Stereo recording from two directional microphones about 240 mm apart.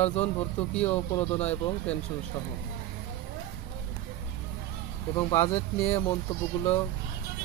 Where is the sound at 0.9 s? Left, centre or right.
Left.